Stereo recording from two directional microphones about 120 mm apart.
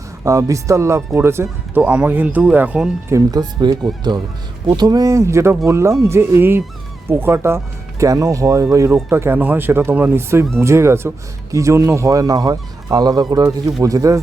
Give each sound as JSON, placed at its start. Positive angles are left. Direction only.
{"t": 0.3, "sound": "speech", "side_deg": -25}
{"t": 3.1, "sound": "speech", "side_deg": -30}